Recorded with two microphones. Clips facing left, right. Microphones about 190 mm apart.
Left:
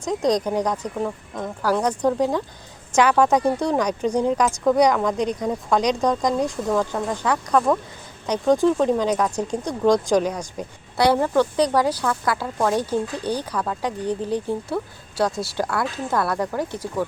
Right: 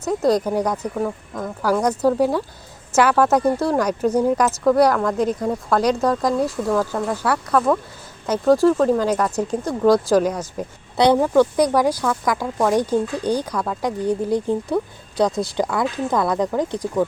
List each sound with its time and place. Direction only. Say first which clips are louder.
0.0 s speech: right 2 dB; 5° right (ahead or behind)
9.1 s speech: right 1 dB; 10° left (ahead or behind)
9.5 s speech: right 3 dB; 5° right (ahead or behind)
10.9 s speech: right 3 dB; 20° right (ahead or behind)